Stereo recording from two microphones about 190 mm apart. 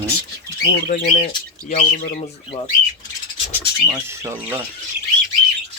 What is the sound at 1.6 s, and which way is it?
Speech, 45° left (ahead or behind).